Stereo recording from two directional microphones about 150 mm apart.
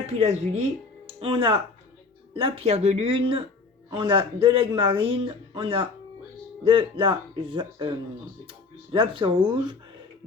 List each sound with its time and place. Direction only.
0.2 s speech: 45° right (ahead or behind)